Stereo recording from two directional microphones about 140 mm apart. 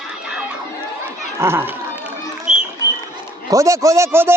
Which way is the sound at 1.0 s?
15° right (ahead or behind).